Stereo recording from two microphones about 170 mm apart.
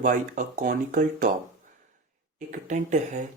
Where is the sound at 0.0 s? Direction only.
50° right (ahead or behind).